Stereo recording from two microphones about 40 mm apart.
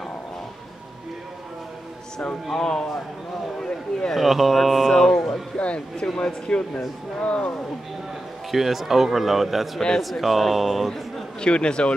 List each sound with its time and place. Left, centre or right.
3.5 s a sound: centre
4.1 s a man's voice: centre
4.8 s a sound: centre
5.6 s a sound: left
6.1 s speech: left
8.5 s a man's voice: centre
9.8 s a man's voice: centre
10.0 s a man's voice: centre
11.4 s speech: left